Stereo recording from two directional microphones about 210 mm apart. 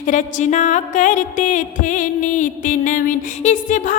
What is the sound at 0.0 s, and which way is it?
Music, 35° left (ahead or behind).